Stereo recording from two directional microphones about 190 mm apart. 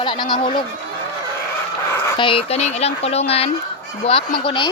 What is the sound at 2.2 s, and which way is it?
Speech, 30° left (ahead or behind).